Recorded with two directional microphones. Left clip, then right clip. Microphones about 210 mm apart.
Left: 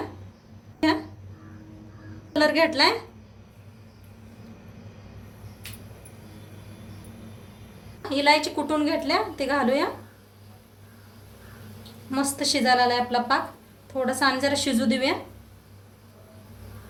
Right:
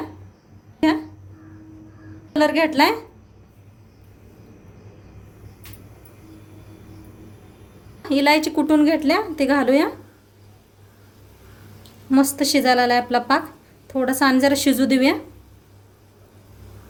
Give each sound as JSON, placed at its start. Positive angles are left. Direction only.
{"t": 2.3, "sound": "a woman's voice", "side_deg": -45}
{"t": 8.0, "sound": "a woman's voice", "side_deg": -55}
{"t": 12.1, "sound": "a woman's voice", "side_deg": -55}